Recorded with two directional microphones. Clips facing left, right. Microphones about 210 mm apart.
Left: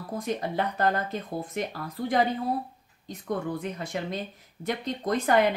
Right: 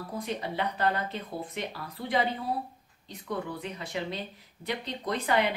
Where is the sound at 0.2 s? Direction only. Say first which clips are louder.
Left 4 dB; 45° left (ahead or behind).